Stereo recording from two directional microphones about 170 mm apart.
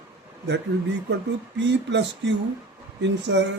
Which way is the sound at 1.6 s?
90° right.